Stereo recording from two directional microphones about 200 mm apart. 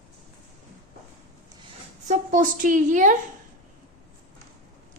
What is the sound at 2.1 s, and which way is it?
A woman's voice, 40° right (ahead or behind).